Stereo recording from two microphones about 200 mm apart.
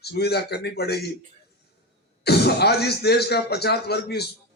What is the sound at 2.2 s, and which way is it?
A man's voice, 55° left (ahead or behind).